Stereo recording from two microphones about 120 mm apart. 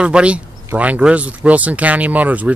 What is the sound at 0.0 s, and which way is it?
Speech, 10° right (ahead or behind).